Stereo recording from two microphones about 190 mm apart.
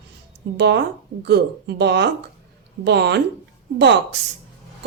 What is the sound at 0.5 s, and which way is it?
Speech, 65° right (ahead or behind).